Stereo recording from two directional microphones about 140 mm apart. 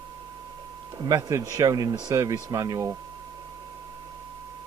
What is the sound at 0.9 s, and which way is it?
Speech, 25° right (ahead or behind).